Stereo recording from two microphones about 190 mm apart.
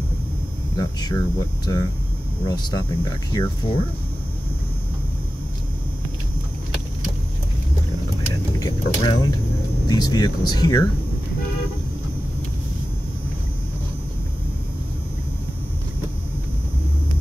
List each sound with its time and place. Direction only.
0.7 s speech: 20° left (ahead or behind)
8.5 s speech: 20° left (ahead or behind)